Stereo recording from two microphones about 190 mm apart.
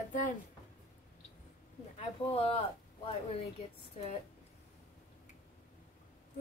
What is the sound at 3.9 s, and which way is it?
Speech, 35° left (ahead or behind).